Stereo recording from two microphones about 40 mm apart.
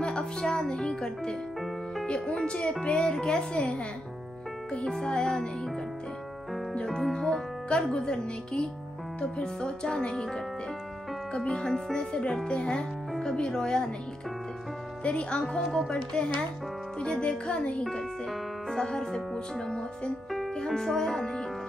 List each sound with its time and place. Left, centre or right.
0.0 s speech: centre
4.8 s speech: centre
6.9 s speech: centre
11.3 s speech: left
15.0 s speech: left
18.7 s speech: centre
20.6 s speech: centre